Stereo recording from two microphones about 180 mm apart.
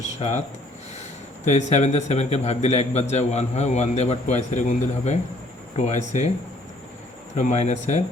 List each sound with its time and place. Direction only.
0.0 s a man's voice: 40° left (ahead or behind)
1.5 s a man's voice: 40° left (ahead or behind)
7.3 s a man's voice: 40° left (ahead or behind)